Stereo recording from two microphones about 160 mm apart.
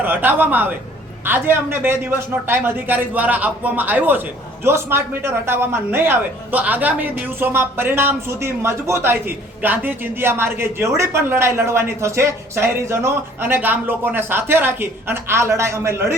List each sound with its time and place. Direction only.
0.0 s speech: 10° right (ahead or behind)